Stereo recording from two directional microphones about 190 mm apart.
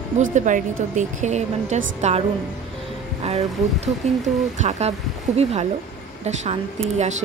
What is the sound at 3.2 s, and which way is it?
Speech, 35° right (ahead or behind).